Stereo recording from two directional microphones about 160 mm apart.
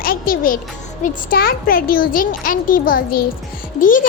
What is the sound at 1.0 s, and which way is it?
A child's voice, 65° left (ahead or behind).